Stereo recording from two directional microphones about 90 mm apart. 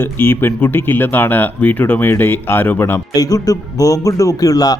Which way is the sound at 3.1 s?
45° left (ahead or behind).